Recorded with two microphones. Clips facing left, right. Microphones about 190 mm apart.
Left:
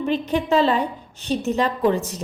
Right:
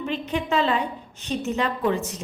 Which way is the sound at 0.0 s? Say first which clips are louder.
Left 5 dB; 40° left (ahead or behind).